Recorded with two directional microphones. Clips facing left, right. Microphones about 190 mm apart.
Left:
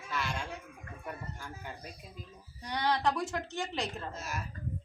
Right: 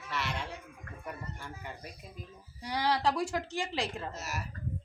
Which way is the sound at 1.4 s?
Centre (ahead or behind).